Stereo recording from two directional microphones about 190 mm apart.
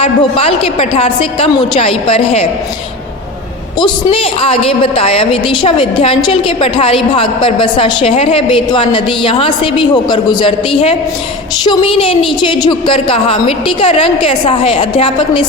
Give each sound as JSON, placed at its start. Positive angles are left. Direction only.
{"t": 0.0, "sound": "a woman's voice", "side_deg": 30}
{"t": 3.8, "sound": "a woman's voice", "side_deg": 25}